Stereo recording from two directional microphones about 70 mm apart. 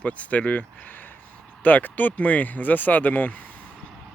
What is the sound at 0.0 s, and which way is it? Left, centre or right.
Speech, left.